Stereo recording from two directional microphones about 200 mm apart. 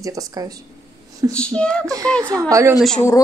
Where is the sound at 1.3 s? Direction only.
5° left (ahead or behind).